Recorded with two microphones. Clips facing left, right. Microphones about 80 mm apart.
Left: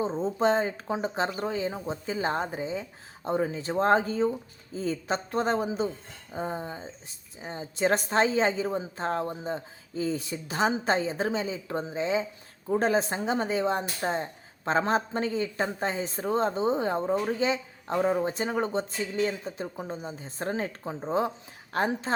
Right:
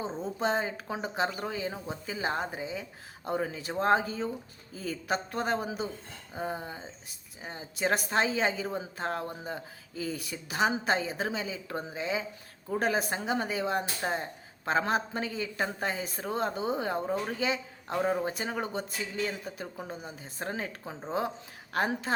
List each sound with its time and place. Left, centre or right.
0.2 s a woman's voice: left